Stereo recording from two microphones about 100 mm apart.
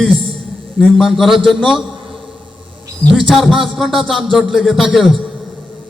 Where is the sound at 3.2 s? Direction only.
5° right (ahead or behind).